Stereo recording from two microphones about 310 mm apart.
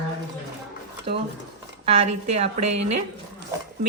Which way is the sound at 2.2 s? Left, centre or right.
Centre.